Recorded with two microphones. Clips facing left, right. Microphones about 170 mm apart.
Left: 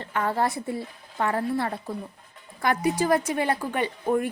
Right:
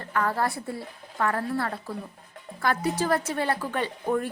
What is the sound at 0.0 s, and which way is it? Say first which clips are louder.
A woman's voice: left 1 dB; 25° left (ahead or behind).